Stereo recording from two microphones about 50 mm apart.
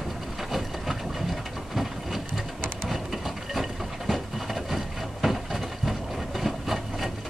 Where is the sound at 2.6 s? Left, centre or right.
Centre.